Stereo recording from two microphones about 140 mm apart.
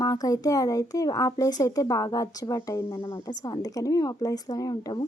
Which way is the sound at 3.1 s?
30° left (ahead or behind).